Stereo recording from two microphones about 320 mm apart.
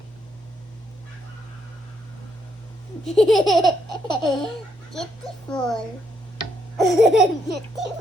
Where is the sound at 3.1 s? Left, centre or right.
Centre.